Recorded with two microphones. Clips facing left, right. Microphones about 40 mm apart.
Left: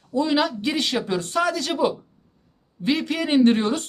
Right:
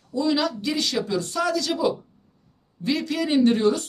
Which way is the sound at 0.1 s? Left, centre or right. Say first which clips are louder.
Left 2 dB; left.